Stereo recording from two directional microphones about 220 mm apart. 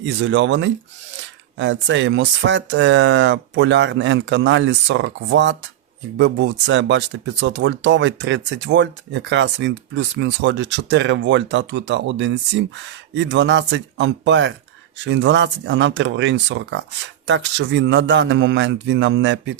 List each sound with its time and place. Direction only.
0.0 s speech: 55° right (ahead or behind)